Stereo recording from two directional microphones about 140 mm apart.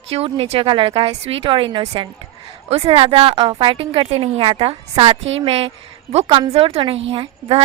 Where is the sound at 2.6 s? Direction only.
45° right (ahead or behind).